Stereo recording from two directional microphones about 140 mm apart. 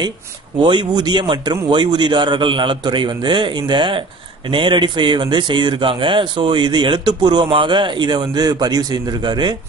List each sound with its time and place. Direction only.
0.6 s speech: 35° right (ahead or behind)